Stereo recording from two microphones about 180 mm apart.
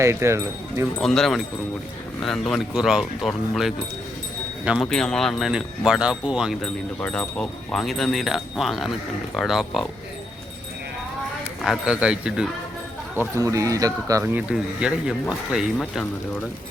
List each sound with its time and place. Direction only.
0.0 s speech: 15° right (ahead or behind)
0.9 s speech: centre (ahead or behind)
11.6 s speech: 5° right (ahead or behind)
13.3 s speech: 20° right (ahead or behind)
14.5 s speech: 5° right (ahead or behind)